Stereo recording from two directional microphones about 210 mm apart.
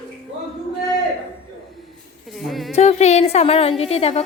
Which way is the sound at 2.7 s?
30° left (ahead or behind).